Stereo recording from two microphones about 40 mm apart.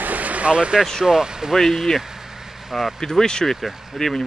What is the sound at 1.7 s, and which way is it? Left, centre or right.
Vehicle, centre.